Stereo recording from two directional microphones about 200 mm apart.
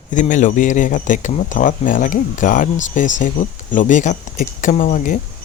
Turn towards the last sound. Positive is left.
turn(degrees=40)  # may be behind; listen again after turning